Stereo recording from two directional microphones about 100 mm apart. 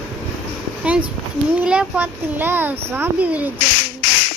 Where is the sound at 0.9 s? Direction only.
10° right (ahead or behind).